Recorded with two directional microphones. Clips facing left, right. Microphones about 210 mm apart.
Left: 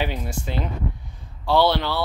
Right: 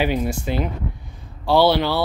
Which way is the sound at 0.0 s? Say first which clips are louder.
Right 6 dB; 10° right (ahead or behind).